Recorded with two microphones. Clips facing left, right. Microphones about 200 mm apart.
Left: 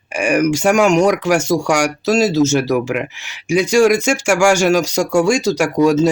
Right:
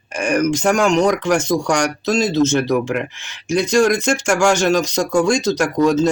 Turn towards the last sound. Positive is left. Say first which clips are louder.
# left 2 dB
turn(degrees=10)  # may be behind; listen again after turning